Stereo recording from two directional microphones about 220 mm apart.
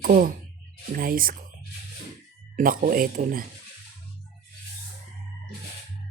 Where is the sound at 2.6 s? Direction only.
40° right (ahead or behind).